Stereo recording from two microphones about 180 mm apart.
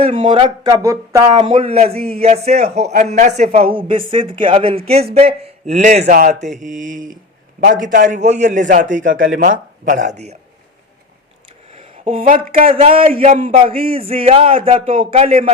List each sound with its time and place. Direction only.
0.1 s a man's voice: 30° right (ahead or behind)
11.7 s a sound: 30° right (ahead or behind)
12.2 s a man's voice: 45° right (ahead or behind)
12.7 s a man's voice: 35° right (ahead or behind)
13.1 s a man's voice: 45° right (ahead or behind)
13.7 s a sound: 55° right (ahead or behind)
13.9 s a man's voice: 30° right (ahead or behind)